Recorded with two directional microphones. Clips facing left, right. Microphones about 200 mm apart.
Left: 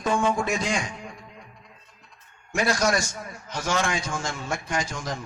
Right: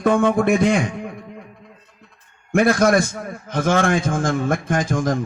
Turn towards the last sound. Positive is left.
turn(degrees=-50)  # may be behind; listen again after turning